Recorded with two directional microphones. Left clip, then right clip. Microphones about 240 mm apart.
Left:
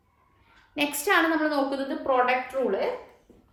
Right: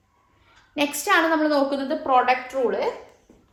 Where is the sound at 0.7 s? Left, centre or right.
Right.